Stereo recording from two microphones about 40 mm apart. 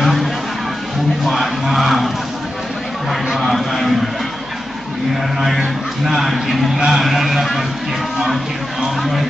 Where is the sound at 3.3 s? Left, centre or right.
Centre.